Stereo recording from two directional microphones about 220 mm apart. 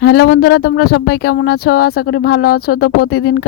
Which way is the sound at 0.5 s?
75° left (ahead or behind).